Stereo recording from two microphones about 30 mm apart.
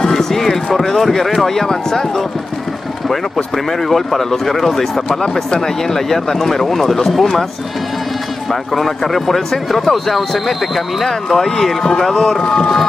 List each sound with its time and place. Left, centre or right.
0.1 s a sound: centre
0.9 s speech: centre
3.5 s speech: centre
8.5 s speech: centre
12.4 s speech: left